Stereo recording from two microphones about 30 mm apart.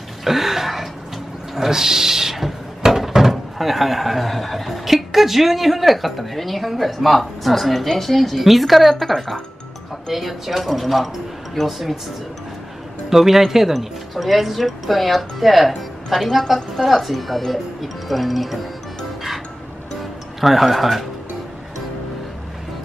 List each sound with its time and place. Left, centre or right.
0.2 s throat clearing: centre
1.5 s speech: centre
2.3 s a sound: centre
3.3 s speech: centre
13.1 s speech: centre
19.9 s music: centre